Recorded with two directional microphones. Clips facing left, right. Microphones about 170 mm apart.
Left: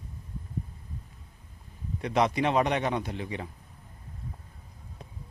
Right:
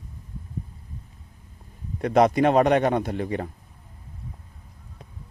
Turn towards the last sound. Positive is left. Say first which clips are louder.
# right 7 dB
turn(degrees=-50)  # may be behind; listen again after turning